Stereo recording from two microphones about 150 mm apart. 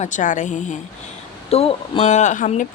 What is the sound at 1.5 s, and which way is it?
Speech, 40° left (ahead or behind).